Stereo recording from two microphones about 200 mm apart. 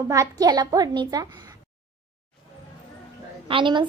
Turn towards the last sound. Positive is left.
turn(degrees=-25)  # may be behind; listen again after turning